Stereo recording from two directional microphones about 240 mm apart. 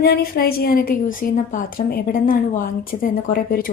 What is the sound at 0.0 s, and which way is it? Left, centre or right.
A woman's voice, left.